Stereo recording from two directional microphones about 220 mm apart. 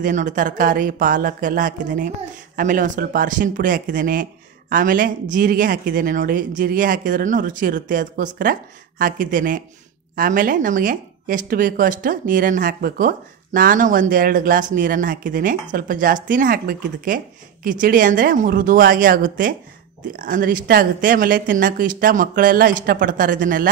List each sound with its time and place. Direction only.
0.0 s speech: 35° right (ahead or behind)